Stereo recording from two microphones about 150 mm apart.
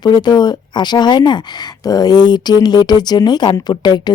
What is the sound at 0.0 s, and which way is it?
Speech, 30° left (ahead or behind).